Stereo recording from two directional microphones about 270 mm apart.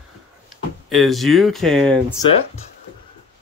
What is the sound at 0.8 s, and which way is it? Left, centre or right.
Speech, centre.